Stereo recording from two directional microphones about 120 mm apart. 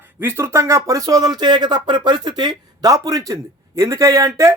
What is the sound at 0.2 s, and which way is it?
Speech, 20° right (ahead or behind).